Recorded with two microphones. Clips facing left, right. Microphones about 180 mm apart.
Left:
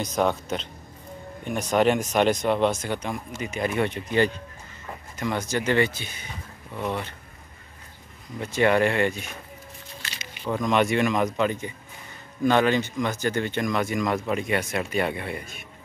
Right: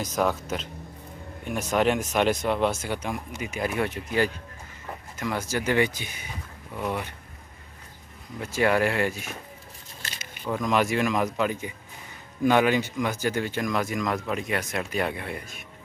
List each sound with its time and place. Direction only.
0.0 s speech: 5° right (ahead or behind)
8.4 s speech: 5° right (ahead or behind)
10.0 s squish: 50° right (ahead or behind)
10.4 s speech: centre (ahead or behind)